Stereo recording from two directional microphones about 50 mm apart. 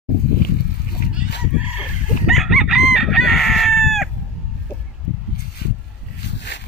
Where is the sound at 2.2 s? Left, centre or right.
Centre.